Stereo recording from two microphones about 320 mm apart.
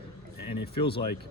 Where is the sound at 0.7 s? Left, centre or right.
Centre.